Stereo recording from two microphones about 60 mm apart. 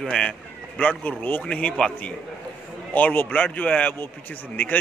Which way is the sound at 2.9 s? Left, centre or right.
Left.